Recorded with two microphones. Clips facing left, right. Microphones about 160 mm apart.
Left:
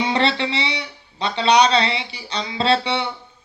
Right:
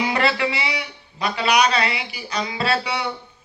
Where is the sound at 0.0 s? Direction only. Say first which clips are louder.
Left 1 dB; 25° left (ahead or behind).